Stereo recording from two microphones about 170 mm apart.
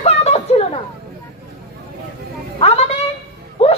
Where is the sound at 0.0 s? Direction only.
40° left (ahead or behind).